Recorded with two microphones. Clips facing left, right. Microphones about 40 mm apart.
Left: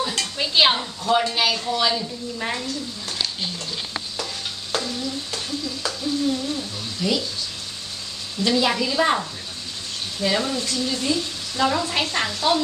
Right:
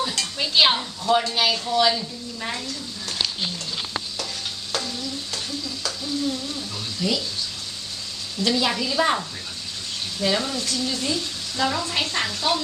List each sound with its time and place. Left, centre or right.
0.0 s dishes: centre
1.2 s speech: centre
4.7 s stir: centre
8.4 s speech: centre